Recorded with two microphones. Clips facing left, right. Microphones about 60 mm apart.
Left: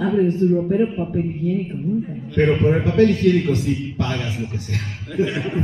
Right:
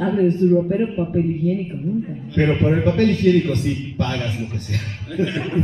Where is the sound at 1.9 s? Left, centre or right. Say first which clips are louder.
Left 1 dB; right.